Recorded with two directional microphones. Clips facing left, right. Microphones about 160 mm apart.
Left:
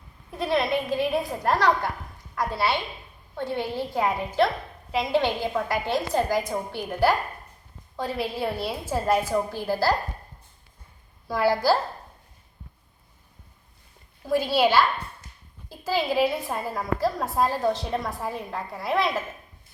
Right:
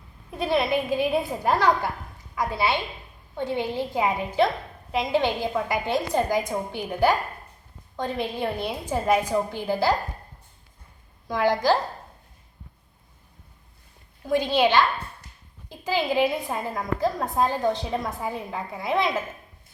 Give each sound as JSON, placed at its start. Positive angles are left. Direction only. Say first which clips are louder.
{"t": 0.3, "sound": "a woman's voice", "louder": "right 1 dB", "side_deg": 0}
{"t": 3.3, "sound": "a woman's voice", "louder": "right 2 dB", "side_deg": -15}
{"t": 4.9, "sound": "a woman's voice", "louder": "even", "side_deg": 0}
{"t": 11.3, "sound": "a child's voice", "louder": "even", "side_deg": 5}
{"t": 14.3, "sound": "a child's voice", "louder": "even", "side_deg": 5}